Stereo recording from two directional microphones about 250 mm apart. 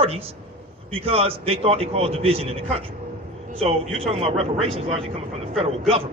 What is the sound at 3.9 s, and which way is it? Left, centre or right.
Speech, right.